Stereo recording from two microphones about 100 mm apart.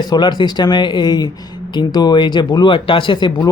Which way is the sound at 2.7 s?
60° left (ahead or behind).